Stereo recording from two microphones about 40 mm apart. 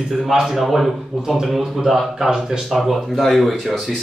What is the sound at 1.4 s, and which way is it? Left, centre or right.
Speech, centre.